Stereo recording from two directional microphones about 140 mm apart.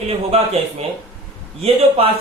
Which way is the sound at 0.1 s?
45° right (ahead or behind).